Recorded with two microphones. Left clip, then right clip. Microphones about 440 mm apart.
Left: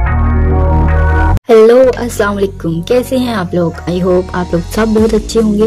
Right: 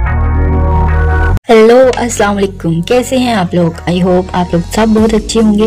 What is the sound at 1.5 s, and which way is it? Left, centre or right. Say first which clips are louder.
Speech: right 1 dB; left.